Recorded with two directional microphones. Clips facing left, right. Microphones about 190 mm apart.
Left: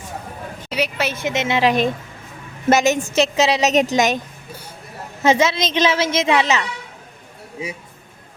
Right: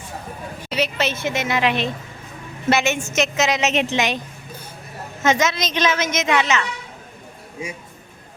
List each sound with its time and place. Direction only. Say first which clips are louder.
0.7 s speech: even; 10° left (ahead or behind); by 1.7 s 25° left (ahead or behind)
2.6 s a woman's voice: left 4 dB; 40° left (ahead or behind)
5.2 s a woman's voice: left 3 dB; 30° left (ahead or behind)